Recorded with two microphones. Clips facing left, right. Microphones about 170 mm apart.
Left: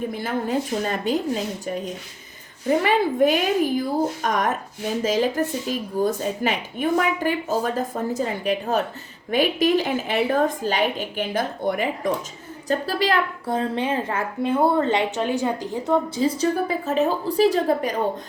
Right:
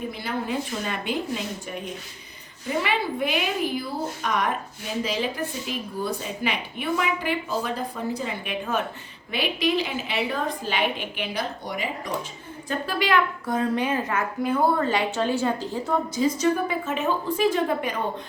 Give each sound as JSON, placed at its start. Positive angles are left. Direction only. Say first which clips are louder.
{"t": 0.1, "sound": "a woman's voice", "louder": "left 4 dB", "side_deg": 45}
{"t": 12.6, "sound": "a woman's voice", "louder": "left 4 dB", "side_deg": 35}
{"t": 16.1, "sound": "a woman's voice", "louder": "left 1 dB", "side_deg": 35}